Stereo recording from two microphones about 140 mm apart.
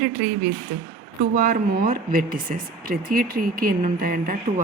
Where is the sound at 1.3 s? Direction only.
75° right (ahead or behind).